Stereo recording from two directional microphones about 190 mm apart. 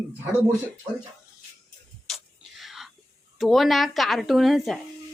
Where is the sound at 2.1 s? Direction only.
Centre (ahead or behind).